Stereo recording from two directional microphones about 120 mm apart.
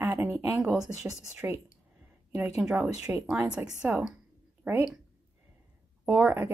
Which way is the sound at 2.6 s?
5° right (ahead or behind).